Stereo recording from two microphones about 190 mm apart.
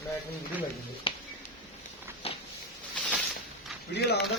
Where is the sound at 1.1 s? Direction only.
30° left (ahead or behind).